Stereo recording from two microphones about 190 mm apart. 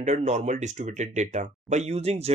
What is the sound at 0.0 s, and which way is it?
Speech, 40° right (ahead or behind).